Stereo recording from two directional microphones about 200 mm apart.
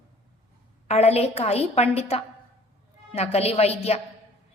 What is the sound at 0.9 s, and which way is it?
A woman's voice, 30° left (ahead or behind).